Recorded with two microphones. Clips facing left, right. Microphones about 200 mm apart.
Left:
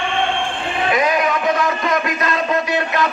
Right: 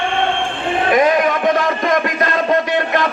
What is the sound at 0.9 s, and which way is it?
Speech, 50° right (ahead or behind).